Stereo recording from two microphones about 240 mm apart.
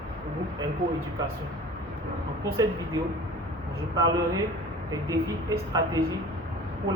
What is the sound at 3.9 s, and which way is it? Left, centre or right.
Speech, centre.